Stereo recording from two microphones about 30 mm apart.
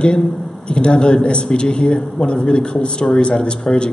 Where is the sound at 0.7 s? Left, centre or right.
Left.